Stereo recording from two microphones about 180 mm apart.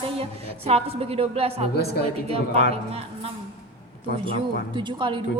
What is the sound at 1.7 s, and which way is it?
Speech, 65° left (ahead or behind).